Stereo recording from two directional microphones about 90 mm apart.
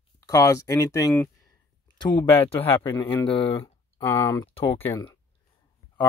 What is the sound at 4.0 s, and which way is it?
Speech, 30° left (ahead or behind).